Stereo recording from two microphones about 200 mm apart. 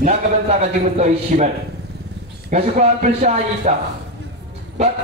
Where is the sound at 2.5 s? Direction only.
35° right (ahead or behind).